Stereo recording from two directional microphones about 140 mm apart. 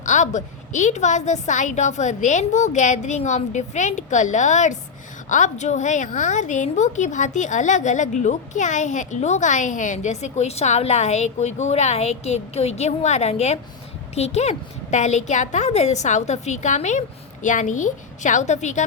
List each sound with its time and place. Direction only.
0.0 s a woman's voice: 60° left (ahead or behind)